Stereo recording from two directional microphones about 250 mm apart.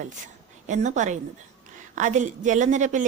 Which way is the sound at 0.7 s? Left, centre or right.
Right.